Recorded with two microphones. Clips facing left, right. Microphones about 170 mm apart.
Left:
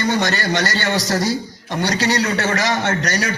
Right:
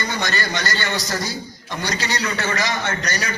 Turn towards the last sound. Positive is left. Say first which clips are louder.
# left 5 dB
turn(degrees=75)  # may be behind; listen again after turning